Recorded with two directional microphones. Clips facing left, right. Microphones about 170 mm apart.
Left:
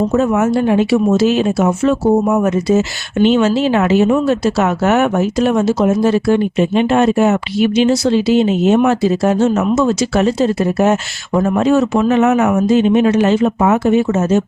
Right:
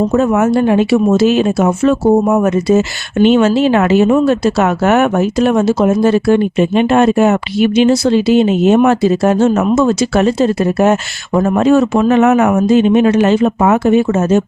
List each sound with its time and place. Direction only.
0.1 s speech: 55° right (ahead or behind)